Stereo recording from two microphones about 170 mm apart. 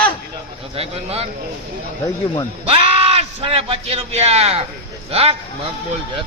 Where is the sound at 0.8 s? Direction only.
35° right (ahead or behind).